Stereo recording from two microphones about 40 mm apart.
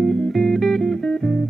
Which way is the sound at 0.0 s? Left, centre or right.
Centre.